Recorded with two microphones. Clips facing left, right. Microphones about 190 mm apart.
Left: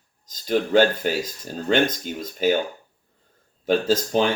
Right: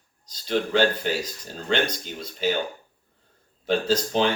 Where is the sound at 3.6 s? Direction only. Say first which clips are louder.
Left 3 dB; 45° left (ahead or behind).